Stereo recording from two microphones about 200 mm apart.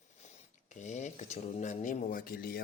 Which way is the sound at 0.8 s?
35° left (ahead or behind).